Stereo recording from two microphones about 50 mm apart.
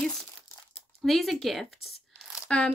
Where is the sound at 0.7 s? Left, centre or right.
Centre.